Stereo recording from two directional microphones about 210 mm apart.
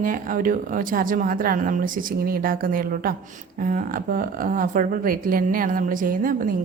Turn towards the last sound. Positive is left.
turn(degrees=-40)  # may be behind; listen again after turning